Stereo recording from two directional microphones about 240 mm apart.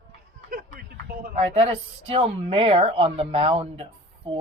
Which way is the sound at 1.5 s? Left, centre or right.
Right.